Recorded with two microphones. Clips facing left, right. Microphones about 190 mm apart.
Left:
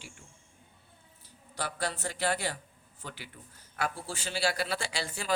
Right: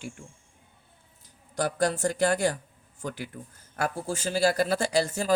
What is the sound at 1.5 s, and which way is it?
A man's voice, 45° right (ahead or behind).